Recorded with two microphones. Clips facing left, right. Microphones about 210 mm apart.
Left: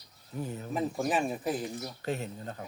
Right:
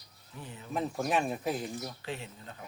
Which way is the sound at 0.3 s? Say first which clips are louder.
Left 9 dB; 45° left (ahead or behind).